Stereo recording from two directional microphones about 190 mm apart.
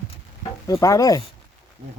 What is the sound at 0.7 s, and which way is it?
Speech, 15° left (ahead or behind).